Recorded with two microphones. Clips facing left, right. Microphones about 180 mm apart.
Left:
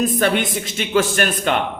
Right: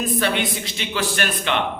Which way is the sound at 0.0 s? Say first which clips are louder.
Left 4 dB; 50° left (ahead or behind).